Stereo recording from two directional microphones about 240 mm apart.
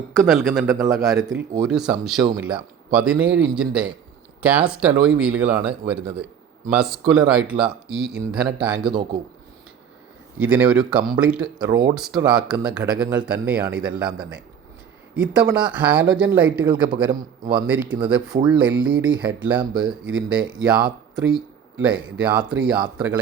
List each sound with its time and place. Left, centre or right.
0.3 s speech: centre
8.9 s a man's voice: centre
10.3 s a man's voice: centre